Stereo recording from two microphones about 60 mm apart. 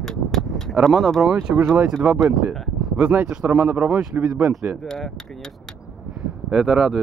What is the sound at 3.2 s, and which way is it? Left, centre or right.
Speech, centre.